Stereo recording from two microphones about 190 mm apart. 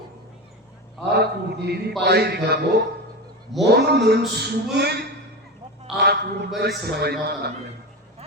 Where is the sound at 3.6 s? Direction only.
60° right (ahead or behind).